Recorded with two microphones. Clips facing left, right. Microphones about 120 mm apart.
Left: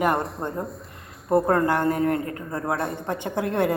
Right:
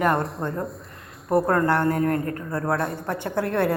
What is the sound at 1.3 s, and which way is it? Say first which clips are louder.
A woman's voice: even; 25° left (ahead or behind).